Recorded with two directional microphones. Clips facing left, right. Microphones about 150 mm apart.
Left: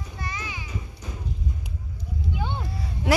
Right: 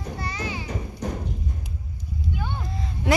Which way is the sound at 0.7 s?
60° right (ahead or behind).